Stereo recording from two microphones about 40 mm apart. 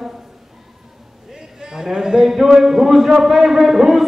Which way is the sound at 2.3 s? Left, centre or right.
Centre.